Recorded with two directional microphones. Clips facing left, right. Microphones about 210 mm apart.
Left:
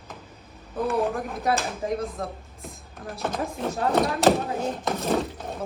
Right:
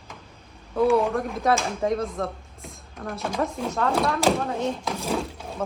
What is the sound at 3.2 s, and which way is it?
Speech, 5° left (ahead or behind).